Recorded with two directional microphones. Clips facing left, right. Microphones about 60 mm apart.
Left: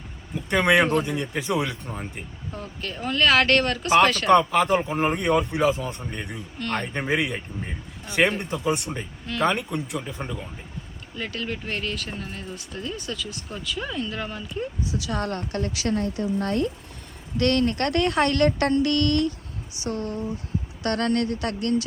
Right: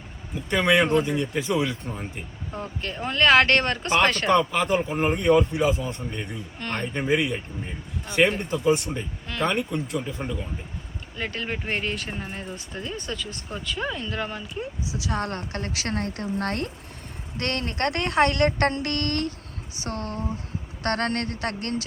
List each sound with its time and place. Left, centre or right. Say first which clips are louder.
0.8 s speech: even; centre
1.2 s speech: right 1 dB; left
1.9 s speech: even; centre
6.9 s speech: right 4 dB; centre
8.0 s speech: right 1 dB; centre
11.2 s speech: right 1 dB; centre
11.4 s speech: right 2 dB; centre; by 16.0 s right
16.0 s speech: left 3 dB; right
17.3 s speech: left 7 dB; right